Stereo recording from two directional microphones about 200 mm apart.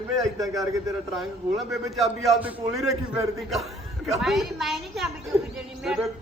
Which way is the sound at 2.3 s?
10° right (ahead or behind).